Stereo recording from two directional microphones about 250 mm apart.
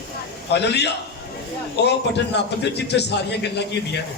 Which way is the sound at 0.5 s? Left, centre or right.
Left.